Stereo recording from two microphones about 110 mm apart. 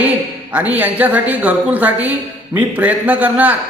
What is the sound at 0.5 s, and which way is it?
Speech, 15° right (ahead or behind).